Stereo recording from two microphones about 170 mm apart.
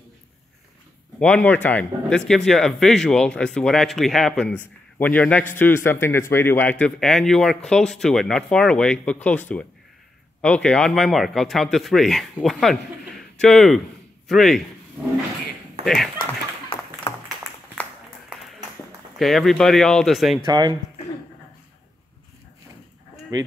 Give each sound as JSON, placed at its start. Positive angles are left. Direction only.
{"t": 1.2, "sound": "speech", "side_deg": 10}
{"t": 15.8, "sound": "speech", "side_deg": 0}
{"t": 16.2, "sound": "clapping", "side_deg": 30}
{"t": 19.1, "sound": "speech", "side_deg": 0}
{"t": 20.4, "sound": "speech", "side_deg": -25}
{"t": 23.3, "sound": "speech", "side_deg": -20}